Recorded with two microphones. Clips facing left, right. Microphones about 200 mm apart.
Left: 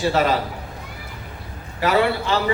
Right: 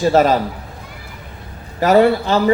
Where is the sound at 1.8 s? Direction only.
45° right (ahead or behind).